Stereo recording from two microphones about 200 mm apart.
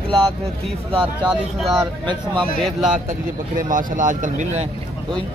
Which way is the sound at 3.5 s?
40° right (ahead or behind).